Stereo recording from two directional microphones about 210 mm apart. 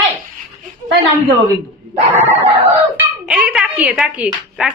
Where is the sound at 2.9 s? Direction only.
5° right (ahead or behind).